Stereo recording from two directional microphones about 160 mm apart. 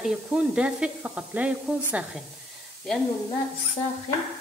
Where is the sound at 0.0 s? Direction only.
5° right (ahead or behind).